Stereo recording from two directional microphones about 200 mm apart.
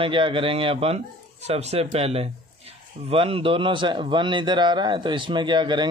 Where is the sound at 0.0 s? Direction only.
25° right (ahead or behind).